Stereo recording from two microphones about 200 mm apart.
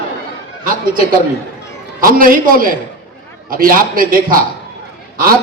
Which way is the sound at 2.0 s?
45° right (ahead or behind).